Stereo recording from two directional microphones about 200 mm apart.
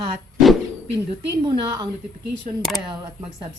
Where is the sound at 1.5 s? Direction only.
20° right (ahead or behind).